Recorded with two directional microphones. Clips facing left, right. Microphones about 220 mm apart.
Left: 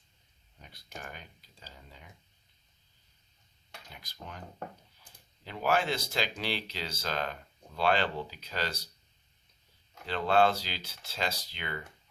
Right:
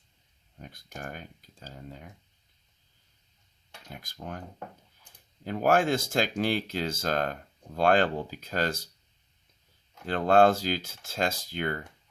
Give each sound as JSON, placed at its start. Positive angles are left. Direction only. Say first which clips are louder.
{"t": 0.6, "sound": "speech", "louder": "right 5 dB", "side_deg": -45}
{"t": 3.9, "sound": "speech", "louder": "right 8 dB", "side_deg": -50}
{"t": 5.4, "sound": "speech", "louder": "right 6 dB", "side_deg": -45}
{"t": 10.1, "sound": "speech", "louder": "right 5 dB", "side_deg": -45}